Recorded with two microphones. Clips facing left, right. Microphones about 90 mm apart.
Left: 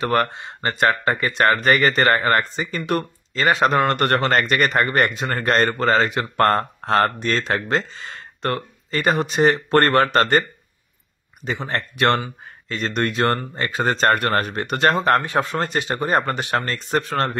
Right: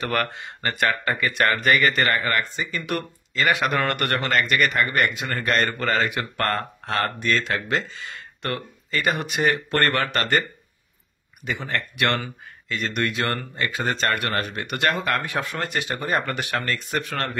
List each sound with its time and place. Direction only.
0.0 s speech: 25° left (ahead or behind)
11.4 s speech: 30° left (ahead or behind)